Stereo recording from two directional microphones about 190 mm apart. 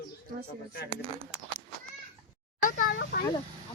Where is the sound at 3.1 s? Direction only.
60° left (ahead or behind).